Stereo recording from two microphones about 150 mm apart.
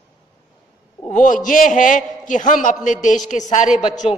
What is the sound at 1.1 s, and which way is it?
A woman's voice, 60° left (ahead or behind).